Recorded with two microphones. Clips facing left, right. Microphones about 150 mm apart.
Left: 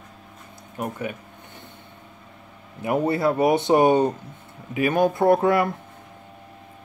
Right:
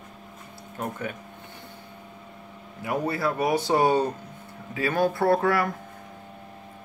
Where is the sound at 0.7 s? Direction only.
10° left (ahead or behind).